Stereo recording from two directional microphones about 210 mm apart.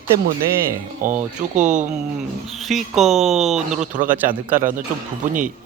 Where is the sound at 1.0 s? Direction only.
35° right (ahead or behind).